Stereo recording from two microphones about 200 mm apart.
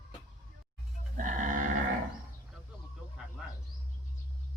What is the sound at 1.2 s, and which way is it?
Sheep, 40° right (ahead or behind).